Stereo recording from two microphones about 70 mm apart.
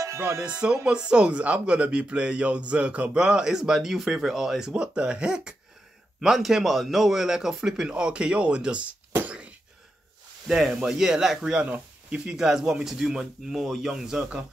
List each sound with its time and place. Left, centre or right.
0.0 s music: right
0.5 s speech: centre
9.2 s a sound: centre
10.5 s speech: centre
11.6 s speech: centre